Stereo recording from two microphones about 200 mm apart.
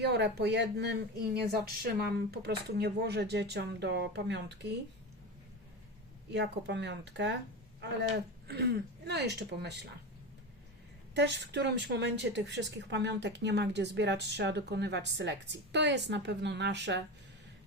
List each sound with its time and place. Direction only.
0.0 s a woman's voice: 55° right (ahead or behind)
6.3 s a woman's voice: 60° right (ahead or behind)
8.4 s a woman's voice: 55° right (ahead or behind)
11.1 s a woman's voice: 60° right (ahead or behind)